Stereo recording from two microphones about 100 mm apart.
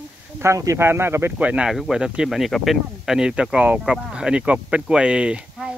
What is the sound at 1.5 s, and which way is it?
Speech, 5° right (ahead or behind).